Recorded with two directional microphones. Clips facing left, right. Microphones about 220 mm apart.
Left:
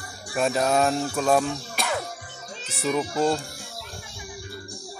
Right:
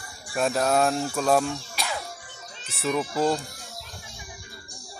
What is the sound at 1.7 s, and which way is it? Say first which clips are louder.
Music: left 4 dB; 55° left (ahead or behind).